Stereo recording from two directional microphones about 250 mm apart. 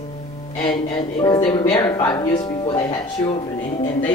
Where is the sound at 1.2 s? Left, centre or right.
Centre.